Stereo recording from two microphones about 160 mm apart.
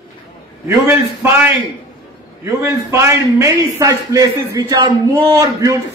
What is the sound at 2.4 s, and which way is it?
A man's voice, 20° right (ahead or behind).